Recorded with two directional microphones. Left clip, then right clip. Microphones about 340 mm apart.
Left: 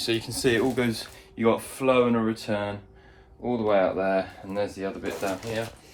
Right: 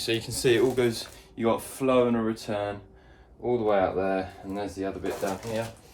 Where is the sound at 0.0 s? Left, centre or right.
Centre.